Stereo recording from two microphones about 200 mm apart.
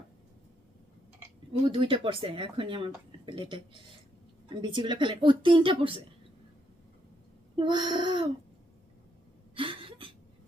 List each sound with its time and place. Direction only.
1.6 s speech: 25° right (ahead or behind)
7.5 s speech: 20° right (ahead or behind)
9.6 s a sound: 25° right (ahead or behind)